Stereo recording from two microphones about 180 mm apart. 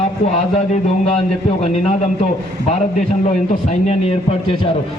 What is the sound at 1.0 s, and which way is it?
Speech, 35° left (ahead or behind).